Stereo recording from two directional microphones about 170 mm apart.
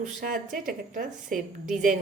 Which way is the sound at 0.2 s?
55° right (ahead or behind).